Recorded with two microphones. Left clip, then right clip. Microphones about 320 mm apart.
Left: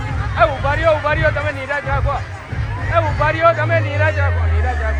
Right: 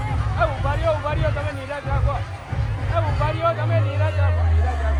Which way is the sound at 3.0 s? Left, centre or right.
Left.